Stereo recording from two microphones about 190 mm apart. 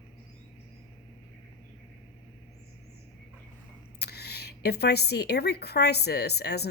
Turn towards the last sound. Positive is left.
turn(degrees=60)  # may be behind; listen again after turning